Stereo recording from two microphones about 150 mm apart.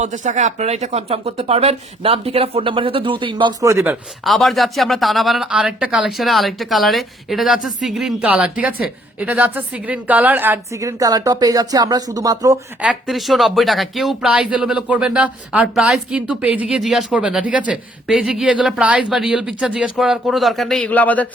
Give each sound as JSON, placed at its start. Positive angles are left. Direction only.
{"t": 0.0, "sound": "speech", "side_deg": -55}
{"t": 3.6, "sound": "speech", "side_deg": -20}
{"t": 4.2, "sound": "speech", "side_deg": 0}
{"t": 12.8, "sound": "speech", "side_deg": -5}